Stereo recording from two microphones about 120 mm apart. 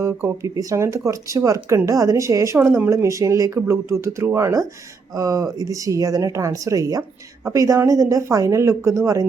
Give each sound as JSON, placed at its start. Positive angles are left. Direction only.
{"t": 0.0, "sound": "speech", "side_deg": -20}